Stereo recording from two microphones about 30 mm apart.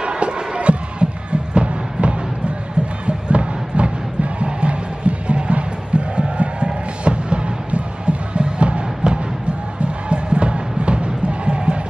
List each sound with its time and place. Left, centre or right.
0.0 s music: right
3.1 s crowd: right
9.8 s music: right